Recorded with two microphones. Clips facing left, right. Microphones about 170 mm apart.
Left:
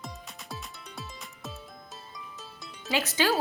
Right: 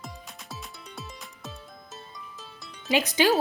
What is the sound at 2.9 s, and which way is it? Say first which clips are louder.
Speech: right 4 dB; 15° right (ahead or behind).